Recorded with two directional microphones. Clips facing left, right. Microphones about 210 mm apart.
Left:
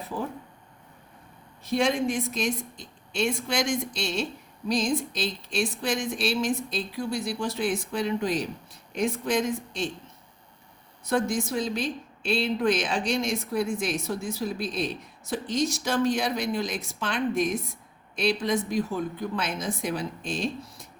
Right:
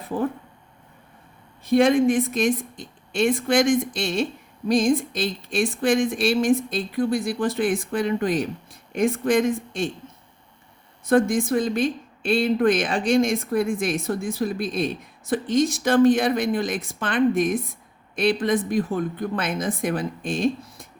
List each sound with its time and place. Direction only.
1.6 s speech: 55° right (ahead or behind)
11.0 s speech: 55° right (ahead or behind)